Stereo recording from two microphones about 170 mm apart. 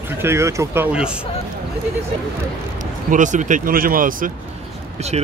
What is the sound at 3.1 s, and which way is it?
Speech, 50° right (ahead or behind).